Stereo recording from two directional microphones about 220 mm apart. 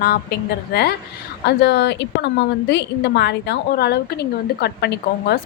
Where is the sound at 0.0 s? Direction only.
45° left (ahead or behind).